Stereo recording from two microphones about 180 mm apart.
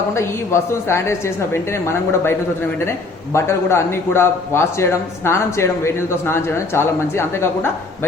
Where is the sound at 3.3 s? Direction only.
15° left (ahead or behind).